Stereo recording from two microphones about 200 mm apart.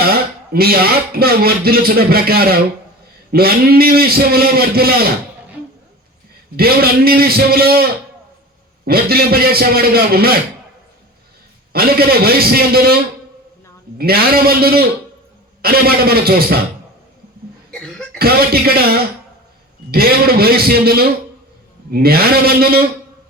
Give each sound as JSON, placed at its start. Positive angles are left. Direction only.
{"t": 0.1, "sound": "speech", "side_deg": -50}
{"t": 6.6, "sound": "speech", "side_deg": -50}
{"t": 11.7, "sound": "speech", "side_deg": -50}
{"t": 14.0, "sound": "speech", "side_deg": -50}
{"t": 17.7, "sound": "cough", "side_deg": 5}
{"t": 18.2, "sound": "speech", "side_deg": -50}